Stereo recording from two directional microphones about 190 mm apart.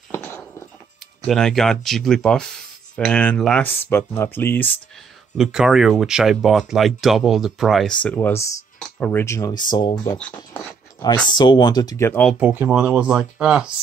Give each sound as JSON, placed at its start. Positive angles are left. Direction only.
{"t": 0.1, "sound": "a sound", "side_deg": 10}
{"t": 1.2, "sound": "speech", "side_deg": 0}
{"t": 5.4, "sound": "speech", "side_deg": 0}
{"t": 10.1, "sound": "speech", "side_deg": 5}
{"t": 11.2, "sound": "speech", "side_deg": 25}
{"t": 12.3, "sound": "speech", "side_deg": -10}